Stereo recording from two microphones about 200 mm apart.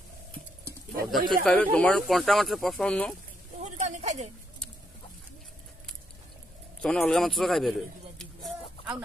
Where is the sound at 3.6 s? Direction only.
35° right (ahead or behind).